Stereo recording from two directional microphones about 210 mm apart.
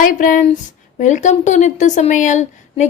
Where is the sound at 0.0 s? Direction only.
40° left (ahead or behind).